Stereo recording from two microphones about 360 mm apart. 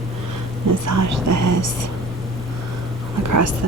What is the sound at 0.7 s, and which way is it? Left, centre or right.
Speech, right.